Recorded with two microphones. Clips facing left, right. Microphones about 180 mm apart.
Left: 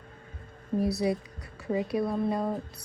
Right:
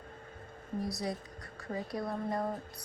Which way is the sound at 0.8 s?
65° left (ahead or behind).